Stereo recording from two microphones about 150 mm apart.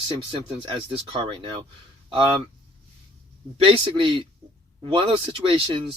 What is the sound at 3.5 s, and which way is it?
Speech, 40° right (ahead or behind).